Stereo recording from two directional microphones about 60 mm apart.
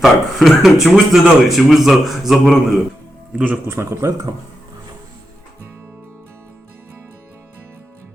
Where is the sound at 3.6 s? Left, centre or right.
Right.